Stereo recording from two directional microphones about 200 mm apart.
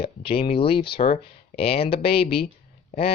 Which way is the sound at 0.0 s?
30° left (ahead or behind).